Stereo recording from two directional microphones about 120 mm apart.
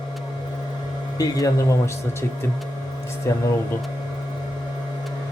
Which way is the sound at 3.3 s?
25° left (ahead or behind).